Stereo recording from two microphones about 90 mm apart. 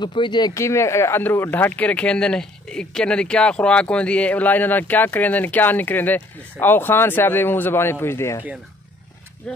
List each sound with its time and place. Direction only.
0.0 s speech: 60° left (ahead or behind)
0.6 s speech: 30° left (ahead or behind)